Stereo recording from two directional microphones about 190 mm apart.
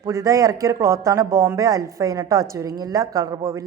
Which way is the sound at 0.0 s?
15° right (ahead or behind).